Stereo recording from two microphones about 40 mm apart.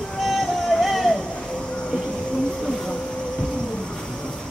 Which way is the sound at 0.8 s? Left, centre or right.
Centre.